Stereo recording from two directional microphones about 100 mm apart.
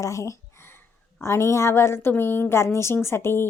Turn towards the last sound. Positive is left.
turn(degrees=25)  # may be behind; listen again after turning